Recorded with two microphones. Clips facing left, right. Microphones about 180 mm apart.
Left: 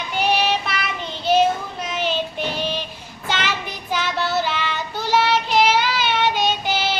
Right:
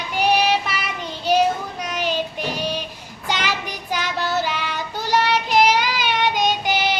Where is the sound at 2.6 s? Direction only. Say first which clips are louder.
Right 1 dB; 10° right (ahead or behind).